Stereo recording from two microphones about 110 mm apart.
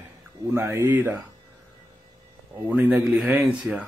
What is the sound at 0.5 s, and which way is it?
Speech, 25° right (ahead or behind).